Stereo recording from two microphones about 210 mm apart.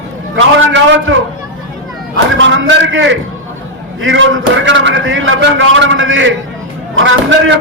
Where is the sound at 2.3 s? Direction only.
60° right (ahead or behind).